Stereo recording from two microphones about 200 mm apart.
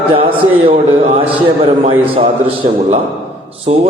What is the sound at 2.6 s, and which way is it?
A man's voice, 30° right (ahead or behind).